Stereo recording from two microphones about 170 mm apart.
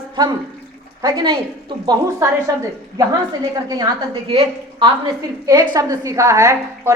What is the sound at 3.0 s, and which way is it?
A woman's voice, 20° right (ahead or behind).